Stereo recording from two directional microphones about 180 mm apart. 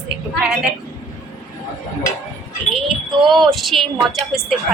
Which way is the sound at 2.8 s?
Centre (ahead or behind).